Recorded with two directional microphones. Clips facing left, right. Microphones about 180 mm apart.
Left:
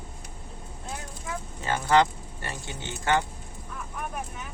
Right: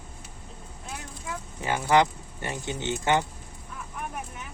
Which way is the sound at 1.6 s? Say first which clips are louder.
Even; 15° right (ahead or behind).